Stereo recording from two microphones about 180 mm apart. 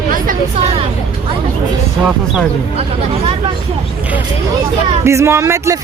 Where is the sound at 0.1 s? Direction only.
45° right (ahead or behind).